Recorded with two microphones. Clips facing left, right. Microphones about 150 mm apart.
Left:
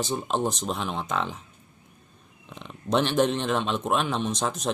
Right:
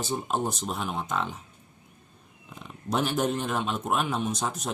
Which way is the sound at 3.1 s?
90° left.